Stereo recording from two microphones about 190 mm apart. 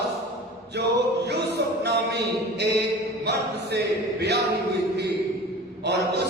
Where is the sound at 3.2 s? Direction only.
60° right (ahead or behind).